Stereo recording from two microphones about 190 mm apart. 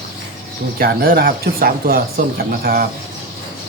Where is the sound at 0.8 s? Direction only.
55° right (ahead or behind).